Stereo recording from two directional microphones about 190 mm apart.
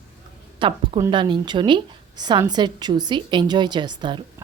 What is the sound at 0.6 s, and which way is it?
A woman's voice, 25° right (ahead or behind).